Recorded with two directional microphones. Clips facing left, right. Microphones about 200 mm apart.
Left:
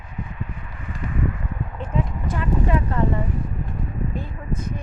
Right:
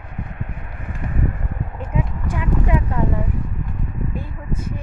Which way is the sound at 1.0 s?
40° right (ahead or behind).